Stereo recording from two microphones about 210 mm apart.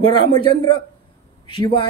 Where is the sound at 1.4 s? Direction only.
25° left (ahead or behind).